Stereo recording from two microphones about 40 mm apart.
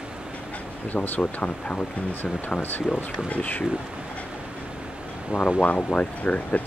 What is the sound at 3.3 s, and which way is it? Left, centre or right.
Speech, left.